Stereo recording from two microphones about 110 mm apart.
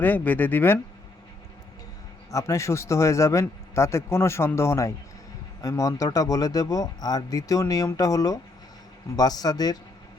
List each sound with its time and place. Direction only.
0.0 s speech: 15° left (ahead or behind)
2.3 s a man's voice: 25° left (ahead or behind)